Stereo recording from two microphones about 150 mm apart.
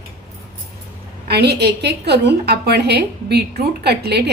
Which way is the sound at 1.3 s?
90° right.